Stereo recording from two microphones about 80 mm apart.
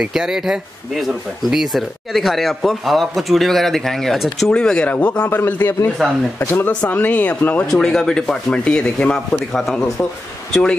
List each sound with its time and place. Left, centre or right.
0.0 s speech: centre; by 7.6 s left
7.6 s speech: centre